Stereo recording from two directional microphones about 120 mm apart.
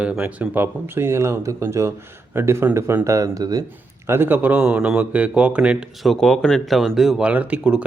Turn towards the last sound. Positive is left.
turn(degrees=-10)  # may be behind; listen again after turning